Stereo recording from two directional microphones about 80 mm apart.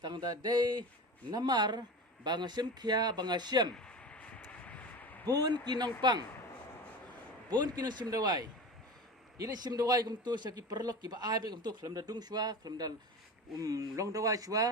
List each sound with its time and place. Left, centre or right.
0.0 s a man's voice: right
3.8 s a sound: centre
5.3 s a man's voice: right
7.8 s a man's voice: right